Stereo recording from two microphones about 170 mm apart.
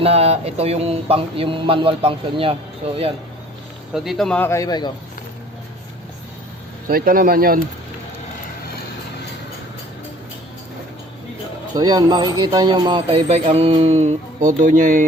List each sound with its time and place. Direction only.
0.0 s speech: 35° right (ahead or behind)
3.9 s speech: centre (ahead or behind); by 4.9 s 20° left (ahead or behind)
6.8 s speech: 55° right (ahead or behind)
11.7 s speech: 25° right (ahead or behind); by 15.0 s 50° right (ahead or behind)